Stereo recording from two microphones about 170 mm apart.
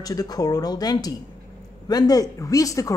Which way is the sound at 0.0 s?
20° left (ahead or behind).